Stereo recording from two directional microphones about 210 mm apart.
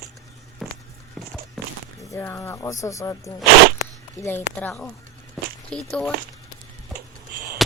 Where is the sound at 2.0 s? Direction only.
15° left (ahead or behind).